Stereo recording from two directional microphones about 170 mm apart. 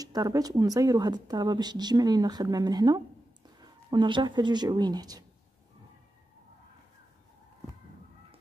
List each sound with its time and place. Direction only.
0.0 s speech: 20° right (ahead or behind)